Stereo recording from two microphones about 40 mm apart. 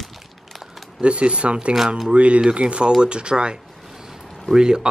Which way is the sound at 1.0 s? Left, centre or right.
Right.